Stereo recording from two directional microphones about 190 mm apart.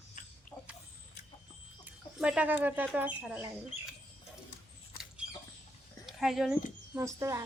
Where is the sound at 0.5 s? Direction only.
20° left (ahead or behind).